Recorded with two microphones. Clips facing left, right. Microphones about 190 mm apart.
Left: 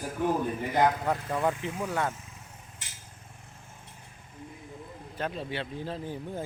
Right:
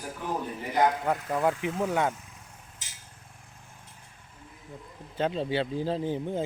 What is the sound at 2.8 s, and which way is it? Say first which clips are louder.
Vehicle: left 1 dB; 60° left (ahead or behind).